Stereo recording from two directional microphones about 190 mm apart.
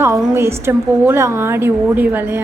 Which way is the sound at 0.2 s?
10° right (ahead or behind).